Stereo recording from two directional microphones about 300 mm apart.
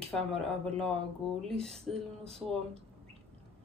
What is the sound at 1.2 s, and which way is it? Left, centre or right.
Speech, centre.